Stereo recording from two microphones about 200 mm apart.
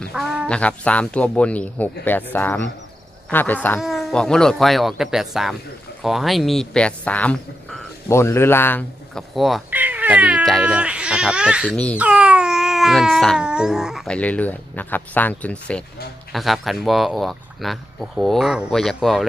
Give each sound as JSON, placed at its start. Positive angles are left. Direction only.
{"t": 0.0, "sound": "speech", "side_deg": 0}